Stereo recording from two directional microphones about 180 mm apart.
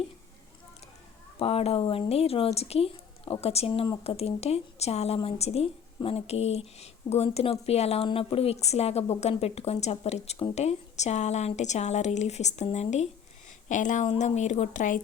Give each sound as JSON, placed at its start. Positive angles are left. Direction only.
{"t": 1.4, "sound": "a woman's voice", "side_deg": 35}